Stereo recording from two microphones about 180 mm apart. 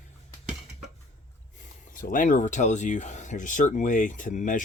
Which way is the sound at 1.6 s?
45° left (ahead or behind).